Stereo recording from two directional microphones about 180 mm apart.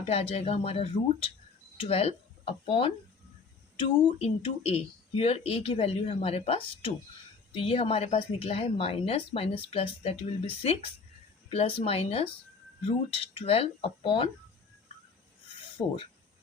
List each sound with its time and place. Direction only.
0.1 s speech: 35° left (ahead or behind)